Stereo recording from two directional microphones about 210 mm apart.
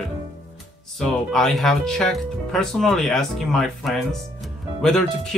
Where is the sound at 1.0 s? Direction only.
Centre (ahead or behind).